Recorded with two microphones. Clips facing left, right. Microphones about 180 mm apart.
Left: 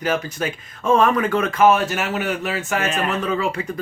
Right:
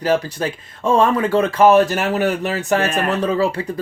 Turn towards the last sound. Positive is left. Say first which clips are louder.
# right 4 dB
turn(degrees=-35)  # may be behind; listen again after turning